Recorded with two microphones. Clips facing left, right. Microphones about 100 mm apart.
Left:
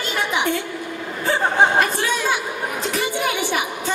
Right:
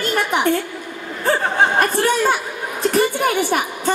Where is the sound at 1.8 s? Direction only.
50° right (ahead or behind).